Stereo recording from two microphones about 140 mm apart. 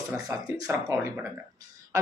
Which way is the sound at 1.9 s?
25° right (ahead or behind).